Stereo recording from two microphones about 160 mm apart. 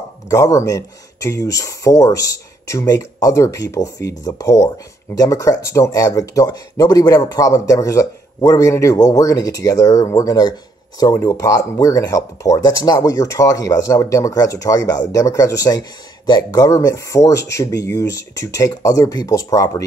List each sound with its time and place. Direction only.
0.3 s speech: 20° left (ahead or behind)